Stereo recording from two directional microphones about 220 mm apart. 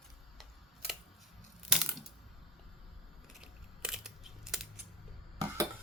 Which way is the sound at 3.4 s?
5° right (ahead or behind).